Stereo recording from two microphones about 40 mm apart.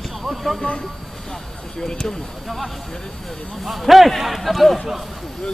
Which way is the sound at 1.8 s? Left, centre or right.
Centre.